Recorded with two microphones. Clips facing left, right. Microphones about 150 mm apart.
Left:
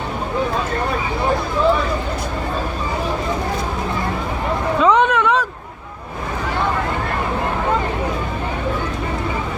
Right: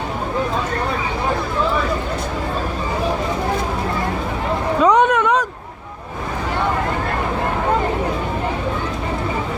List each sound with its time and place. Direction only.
4.8 s vehicle: 45° right (ahead or behind)